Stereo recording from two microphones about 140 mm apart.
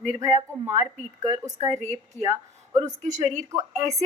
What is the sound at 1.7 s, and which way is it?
Speech, 55° right (ahead or behind).